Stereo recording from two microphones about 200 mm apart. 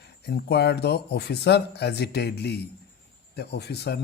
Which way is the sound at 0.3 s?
55° left (ahead or behind).